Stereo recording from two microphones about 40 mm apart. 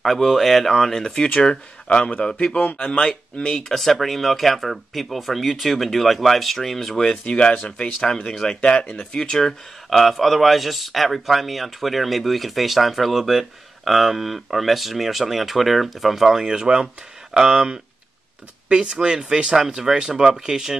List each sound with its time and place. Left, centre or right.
0.0 s speech: centre
1.4 s speech: left
3.7 s speech: centre
7.2 s speech: left
8.3 s speech: left
8.6 s speech: left
9.1 s speech: centre
9.8 s speech: centre
18.7 s speech: right